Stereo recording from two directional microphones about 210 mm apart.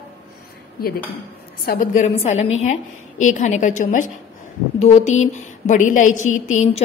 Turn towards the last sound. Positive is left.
turn(degrees=35)  # may be behind; listen again after turning